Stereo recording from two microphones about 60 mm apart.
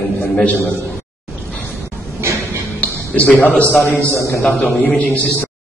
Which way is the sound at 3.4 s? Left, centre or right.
Left.